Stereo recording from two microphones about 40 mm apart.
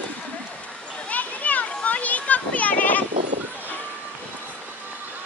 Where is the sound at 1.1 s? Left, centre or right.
Left.